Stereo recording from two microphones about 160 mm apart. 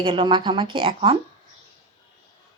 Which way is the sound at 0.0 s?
35° right (ahead or behind).